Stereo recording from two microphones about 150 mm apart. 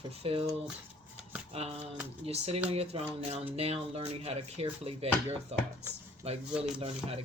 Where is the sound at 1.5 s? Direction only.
40° right (ahead or behind).